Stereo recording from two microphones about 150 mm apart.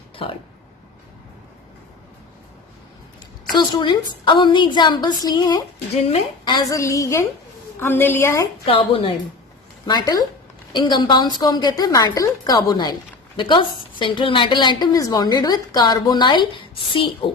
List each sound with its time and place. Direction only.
0.2 s a woman's voice: 35° left (ahead or behind)
3.5 s a woman's voice: 30° left (ahead or behind)
8.6 s a woman's voice: 35° left (ahead or behind)
9.8 s a woman's voice: 25° left (ahead or behind)